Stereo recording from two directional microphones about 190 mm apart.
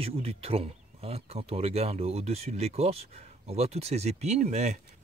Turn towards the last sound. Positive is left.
turn(degrees=-35)  # may be behind; listen again after turning